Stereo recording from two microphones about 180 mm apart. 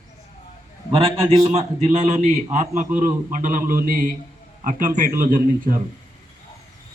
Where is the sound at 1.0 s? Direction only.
30° right (ahead or behind); by 5.7 s 50° right (ahead or behind).